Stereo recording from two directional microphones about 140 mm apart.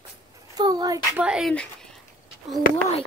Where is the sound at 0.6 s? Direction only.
25° right (ahead or behind).